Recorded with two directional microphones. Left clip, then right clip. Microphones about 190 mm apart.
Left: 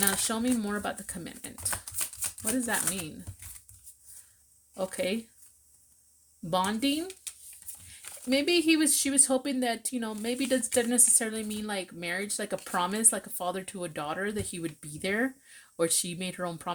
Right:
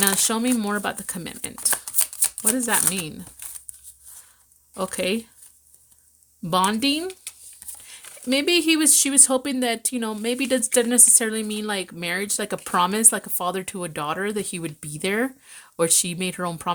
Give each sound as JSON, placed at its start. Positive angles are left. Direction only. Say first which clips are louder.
{"t": 0.0, "sound": "speech", "louder": "right 7 dB", "side_deg": -40}
{"t": 4.7, "sound": "speech", "louder": "right 6 dB", "side_deg": -35}
{"t": 6.4, "sound": "speech", "louder": "right 7 dB", "side_deg": -40}